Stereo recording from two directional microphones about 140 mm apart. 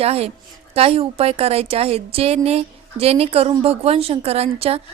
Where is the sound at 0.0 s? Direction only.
45° right (ahead or behind).